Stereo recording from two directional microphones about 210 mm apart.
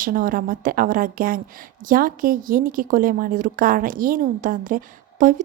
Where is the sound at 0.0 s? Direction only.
40° right (ahead or behind).